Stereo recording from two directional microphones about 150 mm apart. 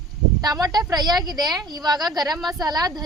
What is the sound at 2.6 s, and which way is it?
Speech, 25° right (ahead or behind).